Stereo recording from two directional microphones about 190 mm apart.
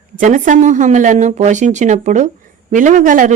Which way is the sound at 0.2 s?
40° right (ahead or behind).